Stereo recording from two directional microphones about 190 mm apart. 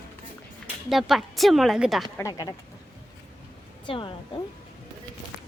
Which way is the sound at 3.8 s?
25° left (ahead or behind).